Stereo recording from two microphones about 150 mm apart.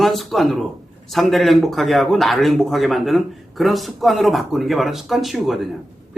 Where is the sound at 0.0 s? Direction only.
Centre (ahead or behind).